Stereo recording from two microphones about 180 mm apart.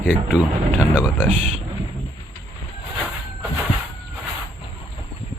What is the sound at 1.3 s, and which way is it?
Speech, 40° right (ahead or behind).